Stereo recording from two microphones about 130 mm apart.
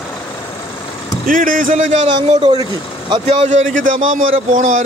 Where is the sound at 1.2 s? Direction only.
90° right; by 2.1 s 70° right (ahead or behind).